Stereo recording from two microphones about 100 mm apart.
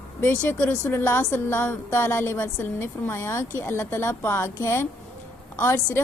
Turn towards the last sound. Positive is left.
turn(degrees=25)  # may be behind; listen again after turning